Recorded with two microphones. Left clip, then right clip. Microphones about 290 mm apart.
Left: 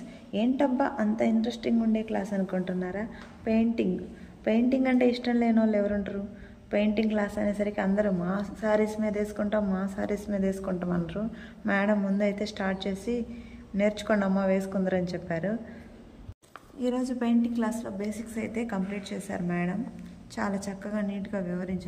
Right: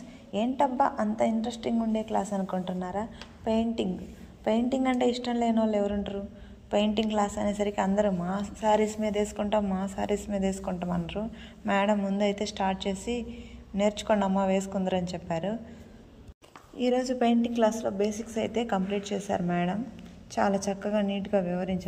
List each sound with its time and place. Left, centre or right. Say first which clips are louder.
0.3 s a woman's voice: even; centre
17.0 s a woman's voice: right 3 dB; centre
20.3 s a woman's voice: right 6 dB; centre
20.9 s a woman's voice: right 6 dB; right